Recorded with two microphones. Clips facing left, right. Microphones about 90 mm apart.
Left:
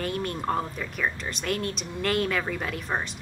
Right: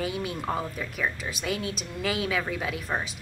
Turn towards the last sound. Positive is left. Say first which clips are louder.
# even
turn(degrees=0)  # may be behind; listen again after turning